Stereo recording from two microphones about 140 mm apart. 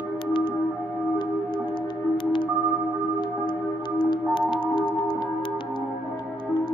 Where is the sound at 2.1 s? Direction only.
35° left (ahead or behind).